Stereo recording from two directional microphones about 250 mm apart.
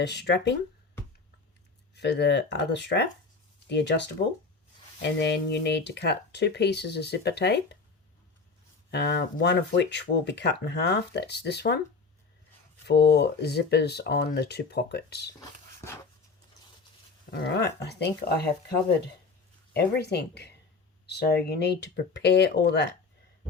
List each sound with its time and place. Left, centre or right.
0.0 s speech: left
2.0 s speech: left
8.9 s speech: left
12.9 s speech: left
17.3 s speech: left
19.7 s speech: left